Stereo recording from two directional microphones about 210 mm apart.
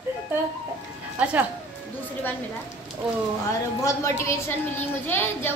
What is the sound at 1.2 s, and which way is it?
Speech, 5° right (ahead or behind).